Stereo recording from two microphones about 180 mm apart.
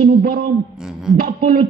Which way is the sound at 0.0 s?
55° right (ahead or behind).